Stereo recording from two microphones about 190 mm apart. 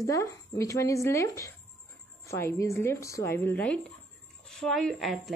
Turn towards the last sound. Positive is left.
turn(degrees=0)  # may be behind; listen again after turning